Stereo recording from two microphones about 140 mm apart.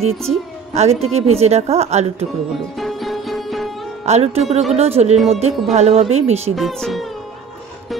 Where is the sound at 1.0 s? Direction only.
45° right (ahead or behind).